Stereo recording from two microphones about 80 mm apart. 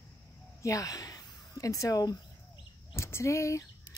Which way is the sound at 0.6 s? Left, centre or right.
Left.